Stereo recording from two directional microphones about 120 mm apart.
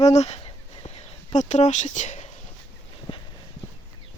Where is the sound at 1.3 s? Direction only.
80° left.